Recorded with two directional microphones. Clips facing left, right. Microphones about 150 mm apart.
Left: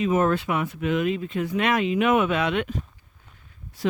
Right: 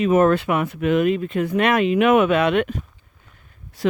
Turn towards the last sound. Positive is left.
turn(degrees=-75)  # may be behind; listen again after turning